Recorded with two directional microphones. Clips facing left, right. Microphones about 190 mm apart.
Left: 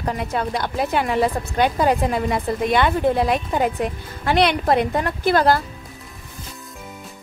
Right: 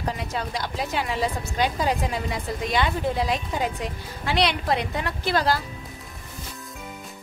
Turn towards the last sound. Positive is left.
turn(degrees=55)  # may be behind; listen again after turning